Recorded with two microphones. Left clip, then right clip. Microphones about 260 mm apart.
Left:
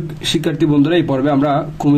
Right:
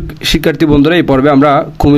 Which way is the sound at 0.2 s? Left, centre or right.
Right.